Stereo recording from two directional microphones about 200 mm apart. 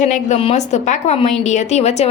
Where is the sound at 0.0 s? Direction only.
35° left (ahead or behind).